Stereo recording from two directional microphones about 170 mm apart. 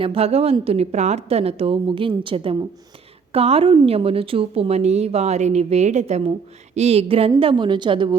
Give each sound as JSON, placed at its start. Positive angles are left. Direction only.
{"t": 0.0, "sound": "a woman's voice", "side_deg": -35}